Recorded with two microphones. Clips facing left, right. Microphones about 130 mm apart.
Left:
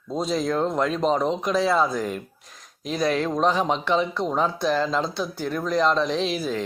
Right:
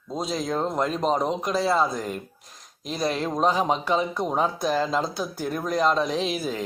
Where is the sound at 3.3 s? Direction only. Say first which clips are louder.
Left 1 dB; 10° right (ahead or behind).